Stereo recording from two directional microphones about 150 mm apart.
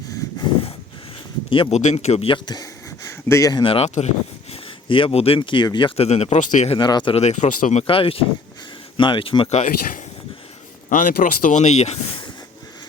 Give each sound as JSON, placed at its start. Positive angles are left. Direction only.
{"t": 1.5, "sound": "speech", "side_deg": 35}
{"t": 1.8, "sound": "speech", "side_deg": 50}
{"t": 3.1, "sound": "speech", "side_deg": 20}
{"t": 6.1, "sound": "speech", "side_deg": 45}
{"t": 6.7, "sound": "speech", "side_deg": 30}
{"t": 9.6, "sound": "speech", "side_deg": 65}